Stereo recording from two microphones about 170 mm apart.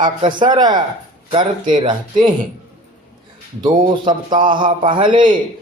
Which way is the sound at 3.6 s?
25° right (ahead or behind).